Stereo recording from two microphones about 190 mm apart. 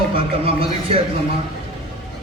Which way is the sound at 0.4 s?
30° right (ahead or behind).